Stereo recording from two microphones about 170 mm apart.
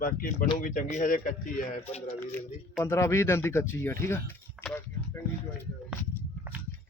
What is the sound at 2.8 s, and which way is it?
Speech, 15° left (ahead or behind).